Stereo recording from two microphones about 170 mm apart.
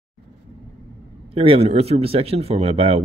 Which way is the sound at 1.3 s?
35° right (ahead or behind).